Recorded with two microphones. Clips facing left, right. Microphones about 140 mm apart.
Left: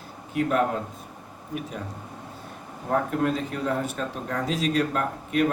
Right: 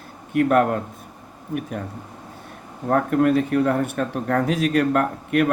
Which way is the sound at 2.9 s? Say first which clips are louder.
Right 6 dB; 60° right (ahead or behind).